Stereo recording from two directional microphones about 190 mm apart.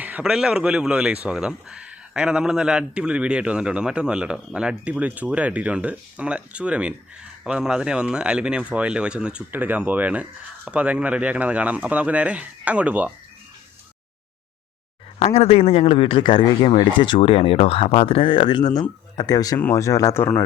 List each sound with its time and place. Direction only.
0.0 s speech: 5° right (ahead or behind)
15.2 s a man's voice: 30° left (ahead or behind); by 20.4 s 10° left (ahead or behind)